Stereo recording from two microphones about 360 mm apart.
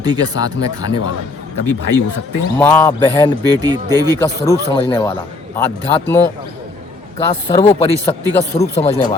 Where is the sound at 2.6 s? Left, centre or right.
Centre.